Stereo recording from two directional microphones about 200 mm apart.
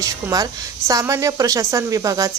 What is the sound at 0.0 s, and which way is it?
Speech, 15° right (ahead or behind).